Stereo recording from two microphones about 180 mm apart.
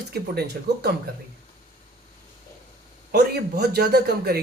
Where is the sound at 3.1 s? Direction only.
65° right (ahead or behind).